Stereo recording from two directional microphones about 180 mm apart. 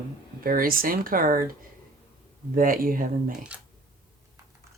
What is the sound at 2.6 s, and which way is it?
Speech, 50° right (ahead or behind).